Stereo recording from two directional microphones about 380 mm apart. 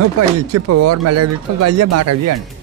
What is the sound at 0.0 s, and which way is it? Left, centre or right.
Speech, right.